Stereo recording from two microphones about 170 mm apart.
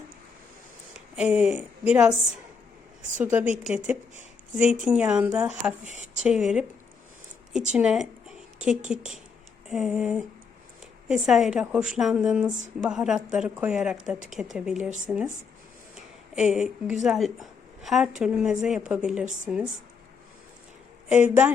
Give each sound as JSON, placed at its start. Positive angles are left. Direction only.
{"t": 0.9, "sound": "a woman's voice", "side_deg": -5}
{"t": 3.2, "sound": "a woman's voice", "side_deg": -10}
{"t": 7.7, "sound": "a woman's voice", "side_deg": -5}
{"t": 14.8, "sound": "speech", "side_deg": -45}
{"t": 16.3, "sound": "a woman's voice", "side_deg": -5}
{"t": 21.1, "sound": "speech", "side_deg": -10}